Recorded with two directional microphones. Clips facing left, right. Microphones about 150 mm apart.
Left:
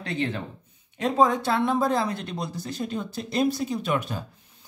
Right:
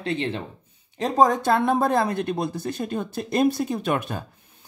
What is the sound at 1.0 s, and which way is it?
Speech, 45° right (ahead or behind).